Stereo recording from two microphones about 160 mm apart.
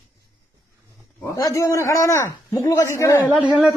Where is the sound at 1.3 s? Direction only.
20° left (ahead or behind).